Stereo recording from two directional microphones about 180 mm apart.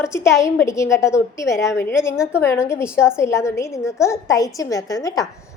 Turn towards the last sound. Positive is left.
turn(degrees=20)  # may be behind; listen again after turning